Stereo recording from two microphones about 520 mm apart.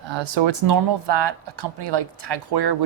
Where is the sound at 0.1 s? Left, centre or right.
Right.